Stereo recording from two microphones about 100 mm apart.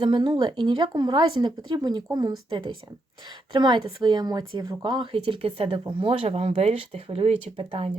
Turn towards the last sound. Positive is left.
turn(degrees=-85)